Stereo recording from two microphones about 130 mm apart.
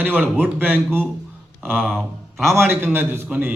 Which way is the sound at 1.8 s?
5° left (ahead or behind).